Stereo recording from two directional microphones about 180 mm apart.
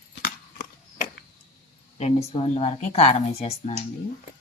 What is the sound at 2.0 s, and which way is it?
Speech, 35° left (ahead or behind).